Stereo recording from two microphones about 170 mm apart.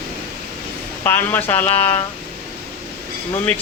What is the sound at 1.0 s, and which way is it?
Speech, 10° left (ahead or behind).